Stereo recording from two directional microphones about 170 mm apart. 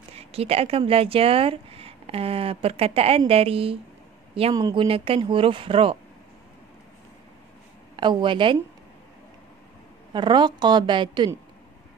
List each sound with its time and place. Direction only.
0.1 s speech: 35° right (ahead or behind)
7.9 s a woman's voice: 30° right (ahead or behind)
10.1 s a woman's voice: 25° right (ahead or behind)